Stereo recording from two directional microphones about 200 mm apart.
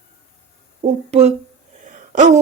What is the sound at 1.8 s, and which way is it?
Gasp, 40° right (ahead or behind).